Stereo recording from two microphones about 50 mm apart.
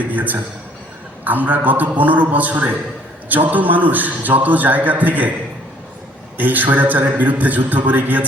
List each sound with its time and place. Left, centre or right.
0.1 s a man's voice: right
6.3 s a man's voice: right